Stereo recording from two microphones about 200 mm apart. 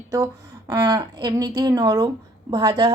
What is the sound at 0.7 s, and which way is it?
A woman's voice, 20° right (ahead or behind).